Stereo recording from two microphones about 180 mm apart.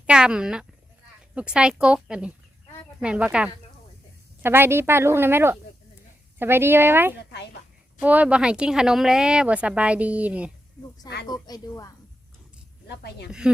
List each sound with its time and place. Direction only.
0.0 s a sound: 5° right (ahead or behind)
1.4 s speech: 5° right (ahead or behind)
11.0 s a woman's voice: 20° left (ahead or behind)
12.9 s speech: 65° left (ahead or behind)
13.4 s speech: 5° right (ahead or behind)